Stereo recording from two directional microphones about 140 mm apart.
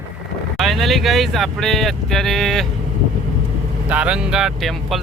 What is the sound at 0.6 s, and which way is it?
Speech, centre (ahead or behind).